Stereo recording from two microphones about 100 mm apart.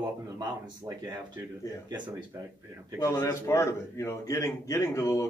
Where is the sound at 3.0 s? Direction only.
25° left (ahead or behind).